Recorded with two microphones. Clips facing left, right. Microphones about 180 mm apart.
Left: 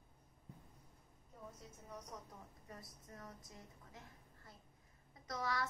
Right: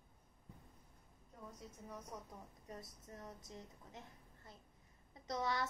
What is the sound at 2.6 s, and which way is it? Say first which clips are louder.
A woman's voice: right 3 dB; 25° right (ahead or behind).